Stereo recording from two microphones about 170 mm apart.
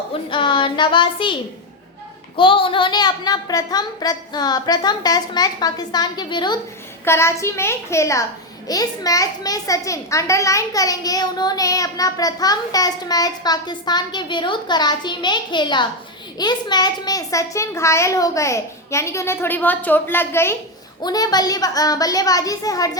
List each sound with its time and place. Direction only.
0.3 s a child's voice: 30° left (ahead or behind)
7.0 s a child's voice: 15° left (ahead or behind)